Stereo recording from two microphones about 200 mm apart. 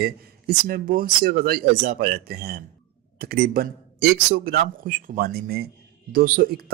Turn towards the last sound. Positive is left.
turn(degrees=-50)  # may be behind; listen again after turning